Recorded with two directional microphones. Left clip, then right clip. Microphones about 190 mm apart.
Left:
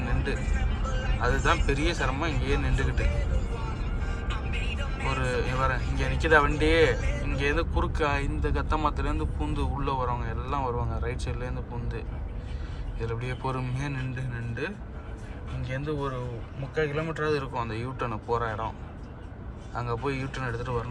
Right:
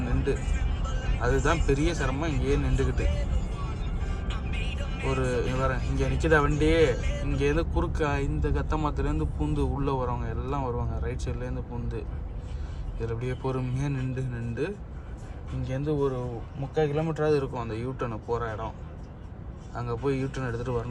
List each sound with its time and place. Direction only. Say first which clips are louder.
0.3 s speech: right 2 dB; 20° right (ahead or behind)
5.2 s speech: left 1 dB; 25° right (ahead or behind)
19.7 s speech: right 1 dB; 20° right (ahead or behind)